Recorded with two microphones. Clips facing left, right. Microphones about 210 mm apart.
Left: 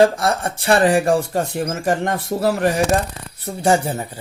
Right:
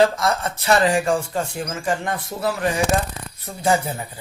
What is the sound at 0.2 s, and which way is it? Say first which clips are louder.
Speech: left 2 dB; 30° left (ahead or behind).